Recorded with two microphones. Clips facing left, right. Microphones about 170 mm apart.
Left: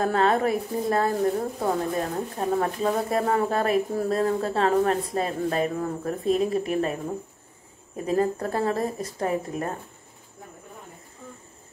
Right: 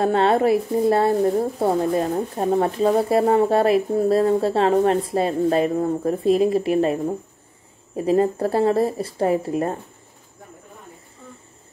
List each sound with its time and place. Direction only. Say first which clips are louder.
0.0 s speech: right 4 dB; 30° right (ahead or behind)